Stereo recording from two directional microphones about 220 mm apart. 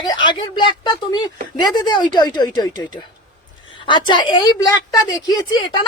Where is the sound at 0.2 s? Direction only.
20° left (ahead or behind).